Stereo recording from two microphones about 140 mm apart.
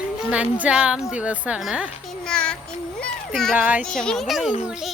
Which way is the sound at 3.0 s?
5° left (ahead or behind).